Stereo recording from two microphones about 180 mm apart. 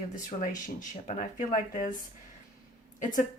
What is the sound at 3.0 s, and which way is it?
Speech, 45° left (ahead or behind).